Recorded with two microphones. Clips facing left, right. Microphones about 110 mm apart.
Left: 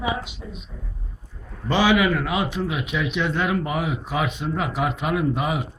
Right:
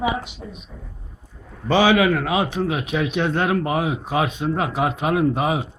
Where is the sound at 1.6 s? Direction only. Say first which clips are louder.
Right 3 dB; 50° right (ahead or behind).